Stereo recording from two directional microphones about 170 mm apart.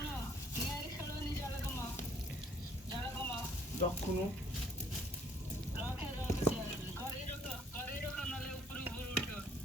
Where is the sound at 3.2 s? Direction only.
10° left (ahead or behind).